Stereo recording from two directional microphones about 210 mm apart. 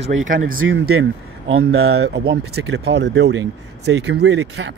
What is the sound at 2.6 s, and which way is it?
Speech, 55° right (ahead or behind).